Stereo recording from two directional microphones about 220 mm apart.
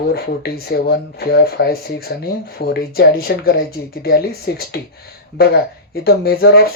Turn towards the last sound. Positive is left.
turn(degrees=45)  # may be behind; listen again after turning